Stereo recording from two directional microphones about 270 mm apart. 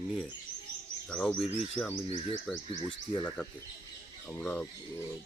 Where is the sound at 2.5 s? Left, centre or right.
Centre.